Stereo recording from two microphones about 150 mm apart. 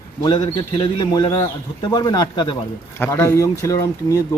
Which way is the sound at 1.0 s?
30° left (ahead or behind).